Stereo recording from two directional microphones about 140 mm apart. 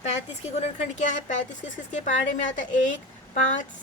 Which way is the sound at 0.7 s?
55° left (ahead or behind).